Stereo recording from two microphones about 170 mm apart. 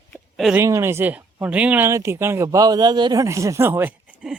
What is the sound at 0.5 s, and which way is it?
Speech, 15° right (ahead or behind).